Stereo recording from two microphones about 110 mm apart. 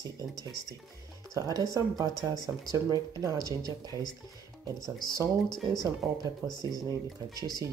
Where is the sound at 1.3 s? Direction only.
30° right (ahead or behind).